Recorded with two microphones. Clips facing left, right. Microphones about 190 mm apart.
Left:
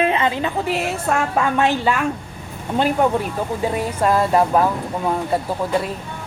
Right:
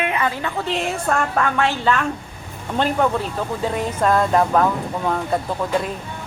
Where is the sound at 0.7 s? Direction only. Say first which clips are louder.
Left 1 dB; 5° left (ahead or behind).